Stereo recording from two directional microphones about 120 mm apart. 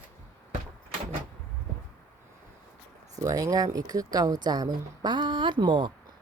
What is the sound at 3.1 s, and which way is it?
Speech, 30° right (ahead or behind).